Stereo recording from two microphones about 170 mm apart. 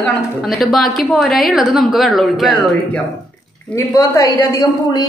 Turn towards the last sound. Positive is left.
turn(degrees=20)  # may be behind; listen again after turning